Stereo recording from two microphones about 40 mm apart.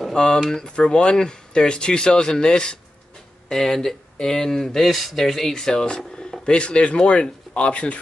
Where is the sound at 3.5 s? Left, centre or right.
Centre.